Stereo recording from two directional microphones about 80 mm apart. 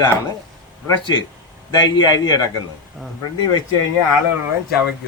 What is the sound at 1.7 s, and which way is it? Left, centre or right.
Speech, left.